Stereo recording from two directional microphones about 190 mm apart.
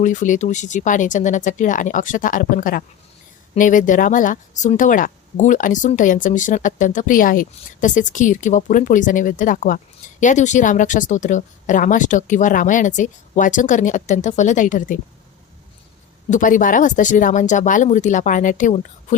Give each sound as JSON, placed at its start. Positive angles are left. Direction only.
{"t": 0.0, "sound": "speech", "side_deg": 40}
{"t": 16.3, "sound": "speech", "side_deg": 45}